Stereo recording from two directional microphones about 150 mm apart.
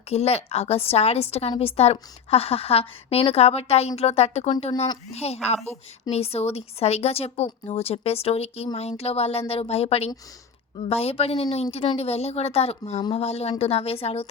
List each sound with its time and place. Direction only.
0.1 s a woman's voice: 45° left (ahead or behind)